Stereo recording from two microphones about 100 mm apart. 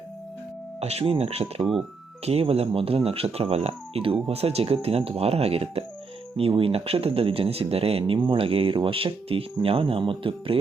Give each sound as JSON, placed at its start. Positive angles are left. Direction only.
{"t": 0.8, "sound": "speech", "side_deg": -90}
{"t": 6.5, "sound": "speech", "side_deg": -70}